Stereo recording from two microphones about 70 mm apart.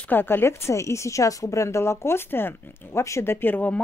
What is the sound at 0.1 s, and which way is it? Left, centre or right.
Speech, left.